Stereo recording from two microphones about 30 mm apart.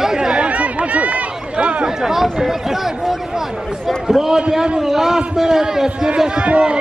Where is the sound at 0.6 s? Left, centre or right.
Right.